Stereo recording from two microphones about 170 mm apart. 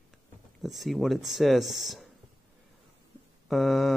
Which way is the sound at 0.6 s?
Centre (ahead or behind).